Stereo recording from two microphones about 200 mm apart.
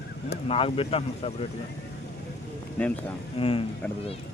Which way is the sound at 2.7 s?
5° left (ahead or behind).